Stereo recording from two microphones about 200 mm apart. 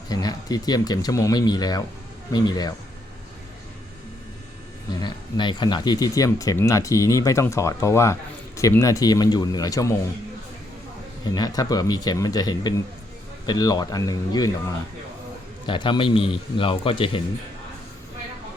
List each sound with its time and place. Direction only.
0.1 s speech: 20° left (ahead or behind)
4.9 s speech: 20° left (ahead or behind)
11.3 s speech: 20° left (ahead or behind)
15.6 s speech: 25° left (ahead or behind)